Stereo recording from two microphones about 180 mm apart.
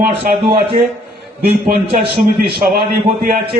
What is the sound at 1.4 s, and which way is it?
Speech, 60° right (ahead or behind).